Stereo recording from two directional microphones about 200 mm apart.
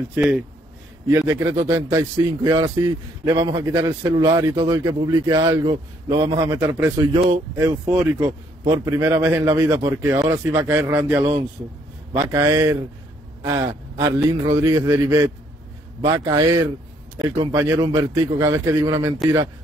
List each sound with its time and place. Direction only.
0.1 s a man's voice: 5° right (ahead or behind)
7.1 s a man's voice: 30° right (ahead or behind)
7.5 s a man's voice: 15° right (ahead or behind)